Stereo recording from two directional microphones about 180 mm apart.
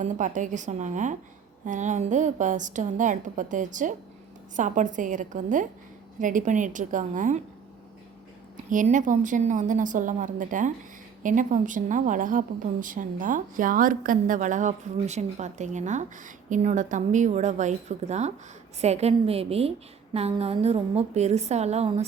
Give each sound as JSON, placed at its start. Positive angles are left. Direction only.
{"t": 0.0, "sound": "a woman's voice", "side_deg": -45}
{"t": 8.7, "sound": "a woman's voice", "side_deg": -45}